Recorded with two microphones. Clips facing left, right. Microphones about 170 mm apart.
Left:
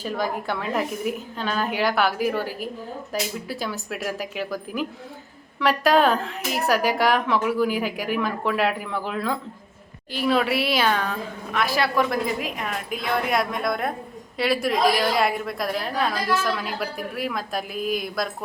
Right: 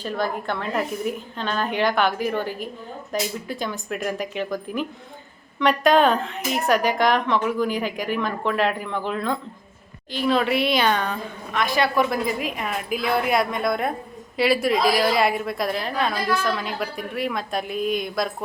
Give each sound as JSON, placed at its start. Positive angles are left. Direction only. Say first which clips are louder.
{"t": 0.0, "sound": "a woman's voice", "louder": "right 1 dB", "side_deg": 10}